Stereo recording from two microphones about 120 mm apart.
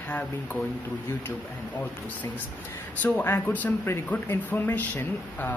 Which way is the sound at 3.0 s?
15° left (ahead or behind).